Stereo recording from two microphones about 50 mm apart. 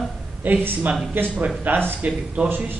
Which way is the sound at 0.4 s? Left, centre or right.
Right.